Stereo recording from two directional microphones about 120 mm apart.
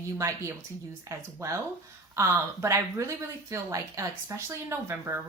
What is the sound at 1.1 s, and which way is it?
Speech, 25° right (ahead or behind).